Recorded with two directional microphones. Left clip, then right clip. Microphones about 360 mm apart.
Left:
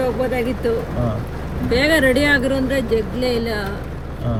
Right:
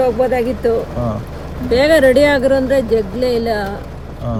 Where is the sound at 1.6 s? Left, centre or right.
Centre.